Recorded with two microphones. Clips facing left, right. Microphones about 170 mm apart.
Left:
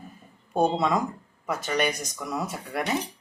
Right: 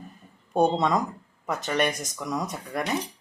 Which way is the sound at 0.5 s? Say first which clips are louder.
Right 1 dB; centre (ahead or behind).